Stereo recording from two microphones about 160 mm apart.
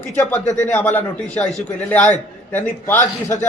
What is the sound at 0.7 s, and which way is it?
A man's voice, 10° left (ahead or behind).